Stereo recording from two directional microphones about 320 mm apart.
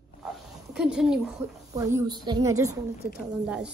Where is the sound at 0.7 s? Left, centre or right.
Centre.